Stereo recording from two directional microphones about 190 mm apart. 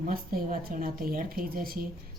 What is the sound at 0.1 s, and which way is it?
A woman's voice, 50° right (ahead or behind).